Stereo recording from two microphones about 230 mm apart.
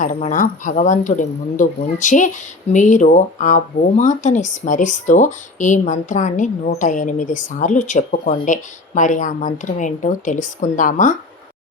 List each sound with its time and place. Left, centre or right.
0.0 s speech: left